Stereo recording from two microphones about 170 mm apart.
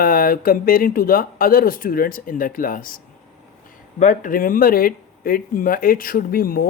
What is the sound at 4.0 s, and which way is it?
Speech, 50° left (ahead or behind).